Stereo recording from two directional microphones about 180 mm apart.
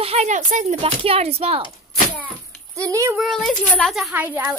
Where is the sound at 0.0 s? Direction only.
35° right (ahead or behind).